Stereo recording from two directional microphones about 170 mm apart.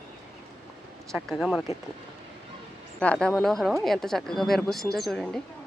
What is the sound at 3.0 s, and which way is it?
Speech, 5° left (ahead or behind).